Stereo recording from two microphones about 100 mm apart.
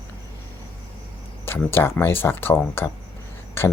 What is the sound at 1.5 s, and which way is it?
Speech, 25° left (ahead or behind).